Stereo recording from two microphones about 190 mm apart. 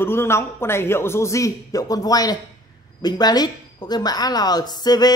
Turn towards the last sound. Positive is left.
turn(degrees=20)  # may be behind; listen again after turning